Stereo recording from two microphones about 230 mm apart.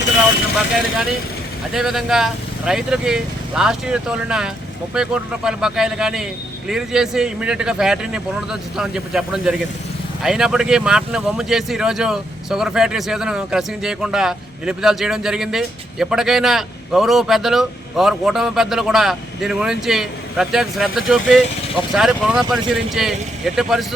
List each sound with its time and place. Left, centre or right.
1.7 s speech: centre